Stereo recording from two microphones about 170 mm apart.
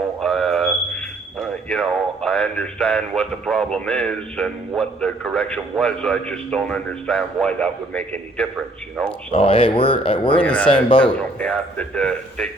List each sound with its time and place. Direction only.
0.2 s a sound: centre (ahead or behind)
2.2 s a man's voice: 5° left (ahead or behind)
9.3 s speech: 30° left (ahead or behind)
10.4 s a man's voice: 10° left (ahead or behind)
10.8 s speech: 30° left (ahead or behind)
11.3 s a man's voice: 10° left (ahead or behind)